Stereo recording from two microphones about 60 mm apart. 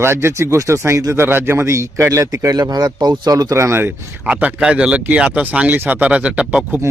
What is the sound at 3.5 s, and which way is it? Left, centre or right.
Speech, right.